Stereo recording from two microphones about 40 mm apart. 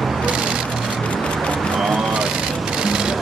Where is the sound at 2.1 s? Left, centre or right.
Right.